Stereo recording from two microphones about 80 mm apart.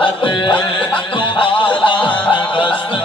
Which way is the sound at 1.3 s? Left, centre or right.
Left.